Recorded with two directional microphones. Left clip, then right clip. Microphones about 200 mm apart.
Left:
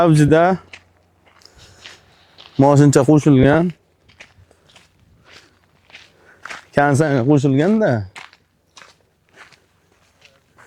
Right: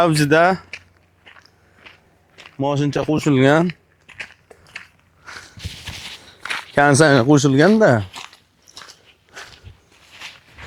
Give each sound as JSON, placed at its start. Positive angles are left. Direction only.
{"t": 0.0, "sound": "speech", "side_deg": 35}
{"t": 2.6, "sound": "speech", "side_deg": 60}
{"t": 3.2, "sound": "speech", "side_deg": 30}
{"t": 6.9, "sound": "speech", "side_deg": 0}